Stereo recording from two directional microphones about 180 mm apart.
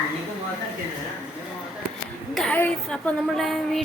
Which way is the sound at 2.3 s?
5° left (ahead or behind).